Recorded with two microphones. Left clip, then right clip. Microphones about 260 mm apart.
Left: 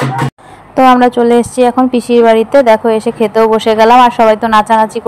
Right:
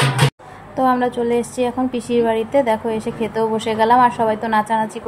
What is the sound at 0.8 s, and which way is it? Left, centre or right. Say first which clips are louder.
A woman's voice: left 11 dB; left.